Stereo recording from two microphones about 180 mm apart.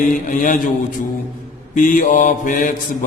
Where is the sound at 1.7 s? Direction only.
45° left (ahead or behind).